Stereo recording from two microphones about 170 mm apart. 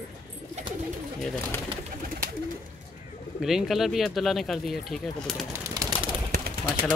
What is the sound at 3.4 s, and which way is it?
Speech, centre (ahead or behind).